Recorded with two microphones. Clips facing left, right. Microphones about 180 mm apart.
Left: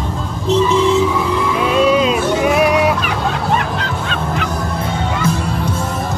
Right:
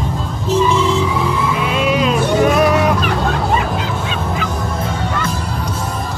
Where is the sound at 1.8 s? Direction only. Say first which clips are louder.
Left 4 dB; 30° left (ahead or behind).